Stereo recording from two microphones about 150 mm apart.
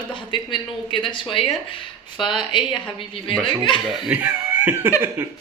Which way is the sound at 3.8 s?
Centre (ahead or behind).